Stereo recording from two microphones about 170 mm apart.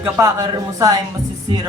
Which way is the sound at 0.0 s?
20° right (ahead or behind).